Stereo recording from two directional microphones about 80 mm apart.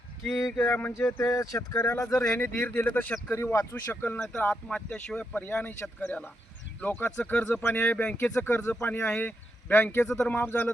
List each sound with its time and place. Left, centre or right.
0.6 s speech: left
1.2 s speech: left
2.4 s speech: left
3.3 s speech: left
4.2 s speech: centre; by 10.7 s left